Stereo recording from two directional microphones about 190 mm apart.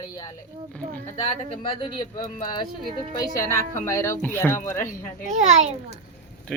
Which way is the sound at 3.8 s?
15° left (ahead or behind).